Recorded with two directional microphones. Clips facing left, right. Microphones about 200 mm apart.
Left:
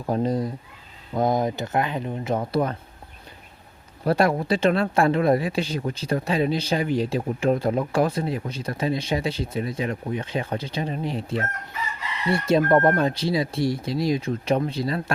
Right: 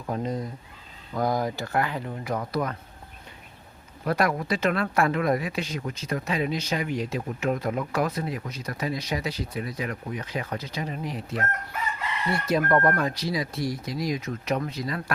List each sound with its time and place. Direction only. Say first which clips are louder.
0.0 s speech: left 6 dB; 35° left (ahead or behind)
1.1 s speech: left 4 dB; 20° left (ahead or behind)
4.0 s speech: left 4 dB; 30° left (ahead or behind)